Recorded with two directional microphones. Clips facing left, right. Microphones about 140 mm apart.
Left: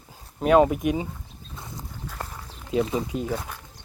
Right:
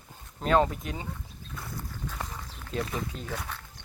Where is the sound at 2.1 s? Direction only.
5° left (ahead or behind).